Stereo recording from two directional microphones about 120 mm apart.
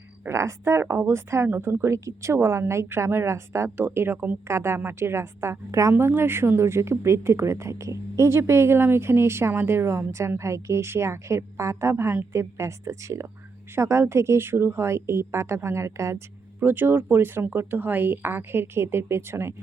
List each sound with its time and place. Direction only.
0.3 s speech: 25° right (ahead or behind)